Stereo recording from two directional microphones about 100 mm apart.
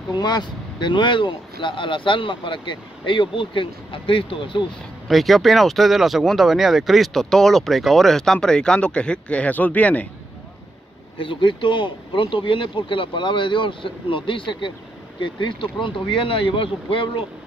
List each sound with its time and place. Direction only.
0.2 s speech: 45° left (ahead or behind)
5.0 s speech: centre (ahead or behind)
11.1 s speech: 60° left (ahead or behind)